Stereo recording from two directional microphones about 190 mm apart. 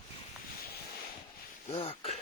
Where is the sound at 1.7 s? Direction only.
35° left (ahead or behind).